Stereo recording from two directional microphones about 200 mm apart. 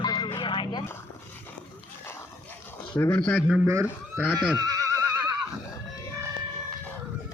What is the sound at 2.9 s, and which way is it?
Speech, 15° left (ahead or behind).